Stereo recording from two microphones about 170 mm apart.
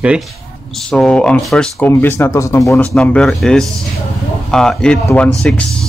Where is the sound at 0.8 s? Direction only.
5° left (ahead or behind).